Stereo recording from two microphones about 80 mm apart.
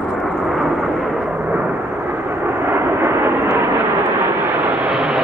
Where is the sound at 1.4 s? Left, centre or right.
Right.